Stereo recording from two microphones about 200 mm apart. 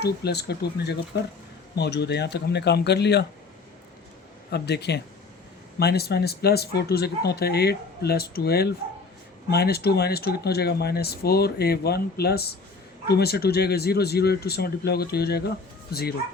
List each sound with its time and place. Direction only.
0.0 s speech: 55° left (ahead or behind)
4.5 s speech: 55° left (ahead or behind)